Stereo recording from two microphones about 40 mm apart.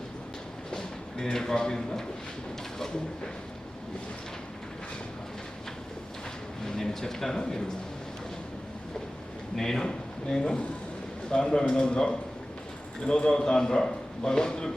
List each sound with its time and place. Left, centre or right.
1.2 s a man's voice: centre
6.7 s speech: centre
9.6 s a man's voice: centre